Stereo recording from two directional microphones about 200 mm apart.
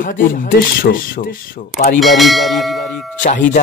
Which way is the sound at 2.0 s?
Centre (ahead or behind).